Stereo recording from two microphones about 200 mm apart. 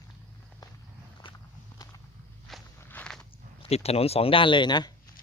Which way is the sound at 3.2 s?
30° left (ahead or behind).